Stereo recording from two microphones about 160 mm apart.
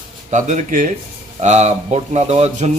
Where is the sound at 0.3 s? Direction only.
50° right (ahead or behind).